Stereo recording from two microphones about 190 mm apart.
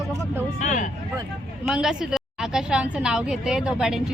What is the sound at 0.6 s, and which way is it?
Speech, 40° left (ahead or behind).